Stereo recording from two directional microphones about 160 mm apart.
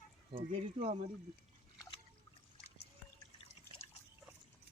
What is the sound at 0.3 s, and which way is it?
Speech, 35° right (ahead or behind).